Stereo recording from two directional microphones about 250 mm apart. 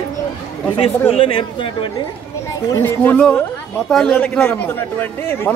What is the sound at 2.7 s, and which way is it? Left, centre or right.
A man's voice, centre.